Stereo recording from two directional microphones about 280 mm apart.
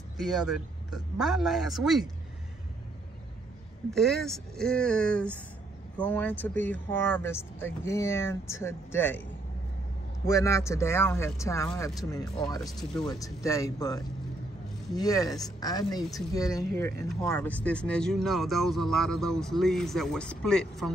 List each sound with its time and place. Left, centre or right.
0.2 s speech: centre
3.9 s speech: centre
10.2 s speech: centre